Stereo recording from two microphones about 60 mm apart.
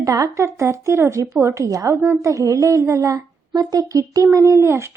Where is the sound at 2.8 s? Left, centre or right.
Right.